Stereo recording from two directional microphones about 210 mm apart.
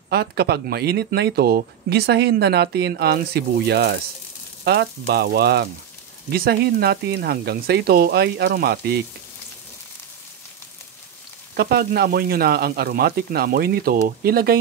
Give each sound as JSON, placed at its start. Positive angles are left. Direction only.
{"t": 0.1, "sound": "speech", "side_deg": -50}
{"t": 11.5, "sound": "speech", "side_deg": -45}